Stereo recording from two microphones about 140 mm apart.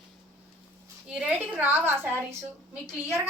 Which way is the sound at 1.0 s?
5° right (ahead or behind).